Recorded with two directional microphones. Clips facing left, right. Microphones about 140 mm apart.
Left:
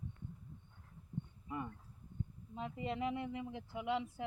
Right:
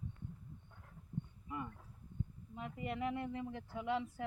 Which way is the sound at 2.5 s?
25° left (ahead or behind).